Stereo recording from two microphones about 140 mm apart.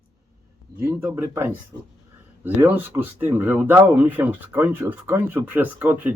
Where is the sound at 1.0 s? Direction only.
15° right (ahead or behind).